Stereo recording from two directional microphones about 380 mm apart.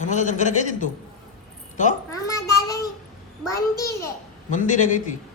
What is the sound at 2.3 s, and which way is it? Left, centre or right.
Child singing, centre.